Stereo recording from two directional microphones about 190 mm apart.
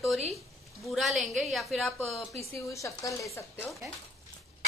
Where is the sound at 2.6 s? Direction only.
15° left (ahead or behind).